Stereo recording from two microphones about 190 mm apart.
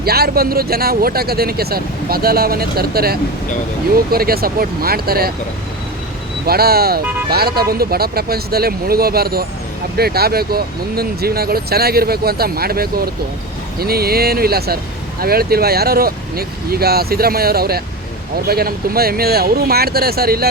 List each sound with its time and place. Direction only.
0.0 s speech: 55° right (ahead or behind)
6.4 s speech: 55° right (ahead or behind)